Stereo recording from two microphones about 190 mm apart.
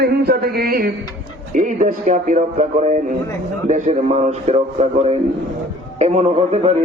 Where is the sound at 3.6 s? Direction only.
40° right (ahead or behind).